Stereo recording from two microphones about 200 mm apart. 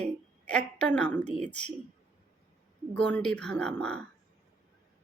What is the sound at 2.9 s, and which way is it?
Speech, 5° left (ahead or behind).